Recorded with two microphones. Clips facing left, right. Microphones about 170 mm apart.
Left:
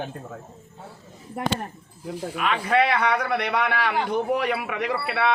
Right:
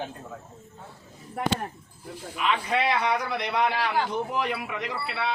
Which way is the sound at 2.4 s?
55° left (ahead or behind).